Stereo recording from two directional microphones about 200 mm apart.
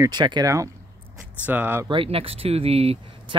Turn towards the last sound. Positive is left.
turn(degrees=-25)  # may be behind; listen again after turning